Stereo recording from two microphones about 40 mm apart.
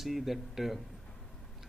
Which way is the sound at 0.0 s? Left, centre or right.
Centre.